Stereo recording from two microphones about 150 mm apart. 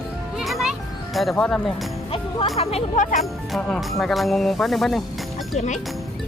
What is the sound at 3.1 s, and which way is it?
Speech, centre (ahead or behind).